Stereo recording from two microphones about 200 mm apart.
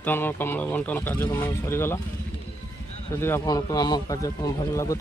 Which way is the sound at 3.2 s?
15° left (ahead or behind).